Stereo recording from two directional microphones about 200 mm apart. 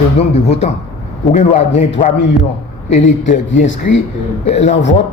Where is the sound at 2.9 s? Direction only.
40° left (ahead or behind).